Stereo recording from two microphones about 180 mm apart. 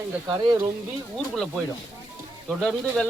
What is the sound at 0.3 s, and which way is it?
Speech, 25° right (ahead or behind).